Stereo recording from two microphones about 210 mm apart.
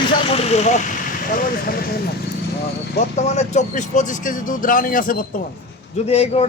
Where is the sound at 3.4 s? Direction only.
35° left (ahead or behind).